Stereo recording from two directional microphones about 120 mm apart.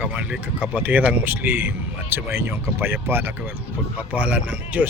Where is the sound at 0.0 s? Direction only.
10° right (ahead or behind).